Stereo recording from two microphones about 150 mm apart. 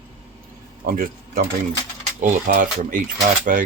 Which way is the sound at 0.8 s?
80° right.